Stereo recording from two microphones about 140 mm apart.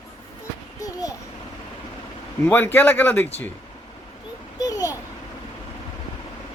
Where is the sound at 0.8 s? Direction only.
25° left (ahead or behind).